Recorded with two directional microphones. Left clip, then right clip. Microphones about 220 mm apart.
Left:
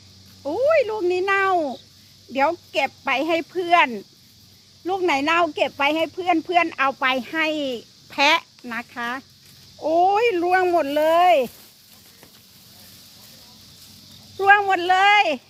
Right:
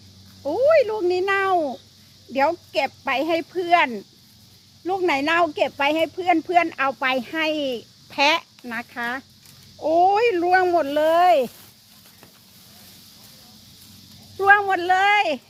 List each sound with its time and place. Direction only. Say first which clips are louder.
0.4 s speech: right 2 dB; 15° left (ahead or behind)
14.3 s speech: left 1 dB; 15° left (ahead or behind)